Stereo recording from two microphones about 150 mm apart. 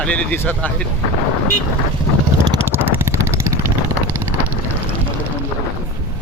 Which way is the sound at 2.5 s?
15° right (ahead or behind).